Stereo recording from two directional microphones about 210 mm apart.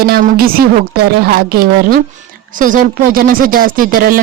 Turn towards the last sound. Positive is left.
turn(degrees=-45)  # may be behind; listen again after turning